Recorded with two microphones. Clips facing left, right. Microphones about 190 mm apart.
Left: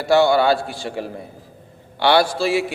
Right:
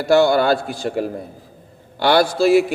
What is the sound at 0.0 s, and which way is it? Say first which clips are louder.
A man's voice: right 1 dB; 45° right (ahead or behind).